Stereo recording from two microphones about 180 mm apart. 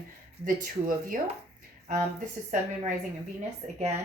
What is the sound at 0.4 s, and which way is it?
Speech, 50° right (ahead or behind).